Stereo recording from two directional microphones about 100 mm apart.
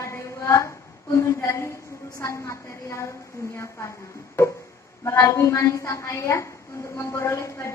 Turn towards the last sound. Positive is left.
turn(degrees=30)  # may be behind; listen again after turning